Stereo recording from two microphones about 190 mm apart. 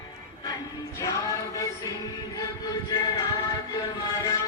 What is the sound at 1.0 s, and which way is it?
Music, 15° left (ahead or behind).